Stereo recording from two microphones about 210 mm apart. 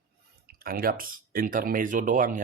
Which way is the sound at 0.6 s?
45° right (ahead or behind).